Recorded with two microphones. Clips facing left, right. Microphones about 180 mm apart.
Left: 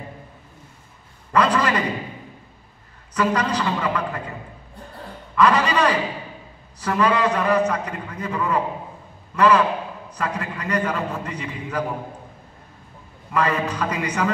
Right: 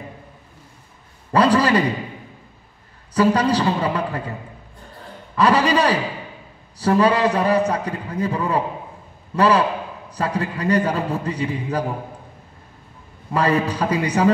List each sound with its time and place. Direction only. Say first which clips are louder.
1.3 s a man's voice: right 4 dB; 35° right (ahead or behind)
3.2 s a man's voice: right 5 dB; 35° right (ahead or behind)
5.3 s a man's voice: right 2 dB; 35° right (ahead or behind)
13.3 s a man's voice: right 3 dB; 35° right (ahead or behind)